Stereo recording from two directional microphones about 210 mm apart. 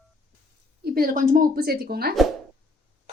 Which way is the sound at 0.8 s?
45° right (ahead or behind).